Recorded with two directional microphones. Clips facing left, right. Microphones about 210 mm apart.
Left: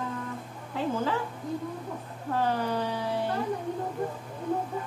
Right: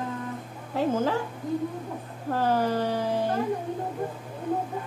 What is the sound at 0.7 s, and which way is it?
Speech, 45° right (ahead or behind).